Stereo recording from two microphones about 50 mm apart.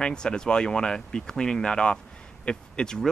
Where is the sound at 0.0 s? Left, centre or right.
Centre.